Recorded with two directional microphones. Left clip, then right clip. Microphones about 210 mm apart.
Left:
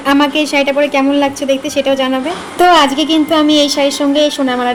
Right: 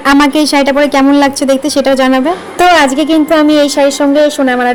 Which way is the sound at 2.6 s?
15° right (ahead or behind).